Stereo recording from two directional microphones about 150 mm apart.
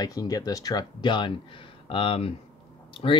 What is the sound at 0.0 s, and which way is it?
Speech, 25° left (ahead or behind).